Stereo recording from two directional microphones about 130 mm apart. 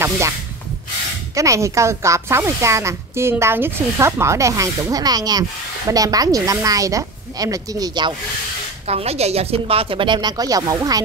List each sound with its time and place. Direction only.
1.3 s speech: 25° right (ahead or behind)
8.8 s a woman's voice: 55° right (ahead or behind); by 11.0 s 25° right (ahead or behind)